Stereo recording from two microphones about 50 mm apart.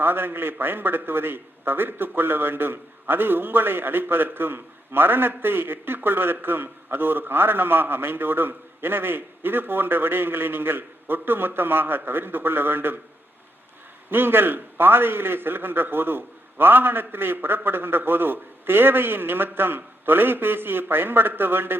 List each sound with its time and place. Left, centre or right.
0.0 s a man's voice: right
14.1 s a man's voice: right